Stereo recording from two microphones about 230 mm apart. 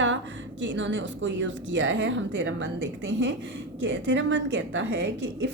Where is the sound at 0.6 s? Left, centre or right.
Right.